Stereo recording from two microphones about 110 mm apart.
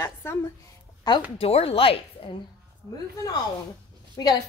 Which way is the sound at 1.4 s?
65° left (ahead or behind).